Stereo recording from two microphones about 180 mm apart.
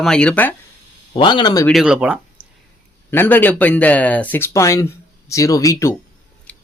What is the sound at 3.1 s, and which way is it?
Speech, 10° left (ahead or behind).